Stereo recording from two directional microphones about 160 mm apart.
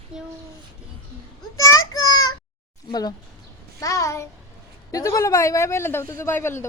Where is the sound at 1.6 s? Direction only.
20° left (ahead or behind).